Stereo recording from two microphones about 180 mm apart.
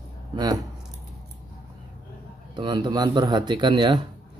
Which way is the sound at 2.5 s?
25° right (ahead or behind).